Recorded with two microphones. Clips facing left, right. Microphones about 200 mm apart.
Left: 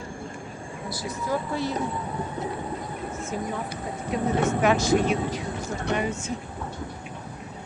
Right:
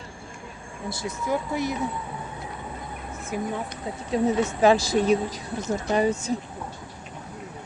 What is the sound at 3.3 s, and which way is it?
Speech, 10° right (ahead or behind).